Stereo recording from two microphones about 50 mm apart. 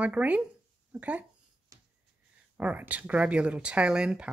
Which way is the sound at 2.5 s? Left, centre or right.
Right.